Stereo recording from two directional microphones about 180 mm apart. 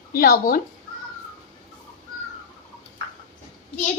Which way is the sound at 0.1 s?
55° left (ahead or behind).